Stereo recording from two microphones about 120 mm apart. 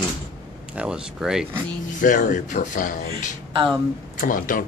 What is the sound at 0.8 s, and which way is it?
Speech, 5° right (ahead or behind).